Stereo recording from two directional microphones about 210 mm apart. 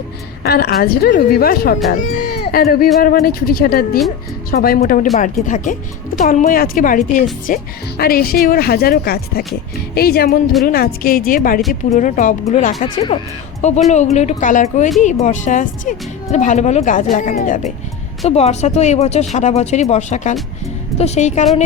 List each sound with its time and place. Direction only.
0.4 s speech: 50° left (ahead or behind); by 21.4 s 35° left (ahead or behind)